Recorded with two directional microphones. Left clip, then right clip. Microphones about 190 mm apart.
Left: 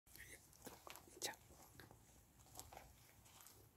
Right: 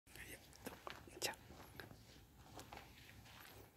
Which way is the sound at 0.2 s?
Centre (ahead or behind).